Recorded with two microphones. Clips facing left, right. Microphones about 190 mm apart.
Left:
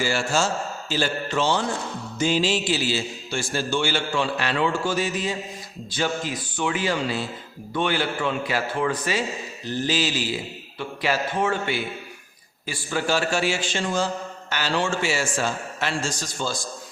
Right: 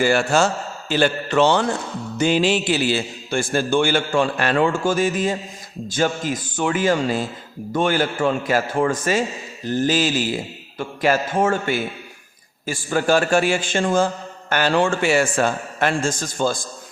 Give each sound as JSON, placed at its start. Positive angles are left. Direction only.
{"t": 0.0, "sound": "a man's voice", "side_deg": -60}